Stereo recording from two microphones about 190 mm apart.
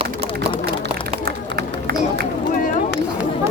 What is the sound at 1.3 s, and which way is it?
Run, 55° right (ahead or behind).